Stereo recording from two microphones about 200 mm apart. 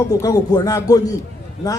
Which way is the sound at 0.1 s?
15° left (ahead or behind).